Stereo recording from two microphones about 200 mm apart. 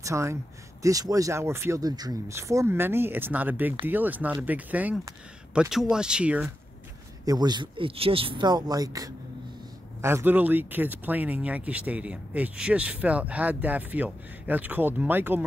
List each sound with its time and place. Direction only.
0.0 s speech: 15° right (ahead or behind)
7.2 s speech: 20° right (ahead or behind)